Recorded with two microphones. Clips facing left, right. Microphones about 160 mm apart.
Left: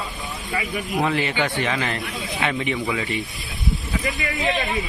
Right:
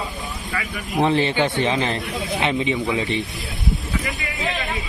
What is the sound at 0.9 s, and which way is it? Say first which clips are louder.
Speech: right 4 dB; 25° right (ahead or behind).